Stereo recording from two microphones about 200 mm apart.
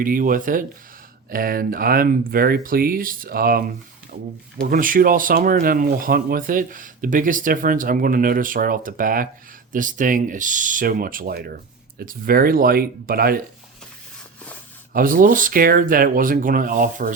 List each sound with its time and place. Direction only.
0.0 s speech: 45° right (ahead or behind)
4.6 s speech: 45° right (ahead or behind)
14.9 s speech: 45° right (ahead or behind)